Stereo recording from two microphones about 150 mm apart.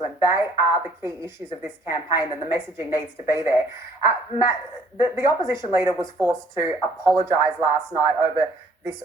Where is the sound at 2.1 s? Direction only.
15° right (ahead or behind).